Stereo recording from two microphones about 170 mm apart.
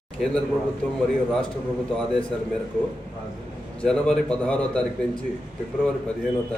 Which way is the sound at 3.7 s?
5° left (ahead or behind).